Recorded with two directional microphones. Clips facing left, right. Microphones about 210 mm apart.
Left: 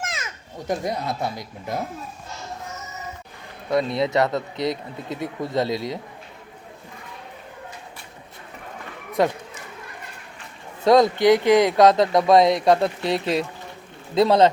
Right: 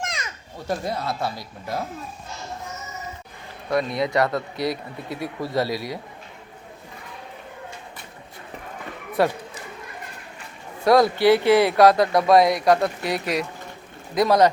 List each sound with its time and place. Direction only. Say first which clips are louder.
0.0 s children playing: even; 5° left (ahead or behind)
0.7 s speech: left 1 dB; 20° left (ahead or behind)
3.7 s speech: left 1 dB; 25° left (ahead or behind)
9.2 s speech: even; 20° left (ahead or behind)
10.8 s speech: left 1 dB; 20° left (ahead or behind)